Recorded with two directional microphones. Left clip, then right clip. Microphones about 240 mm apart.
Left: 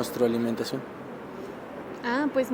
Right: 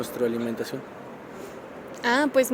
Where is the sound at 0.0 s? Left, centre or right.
Centre.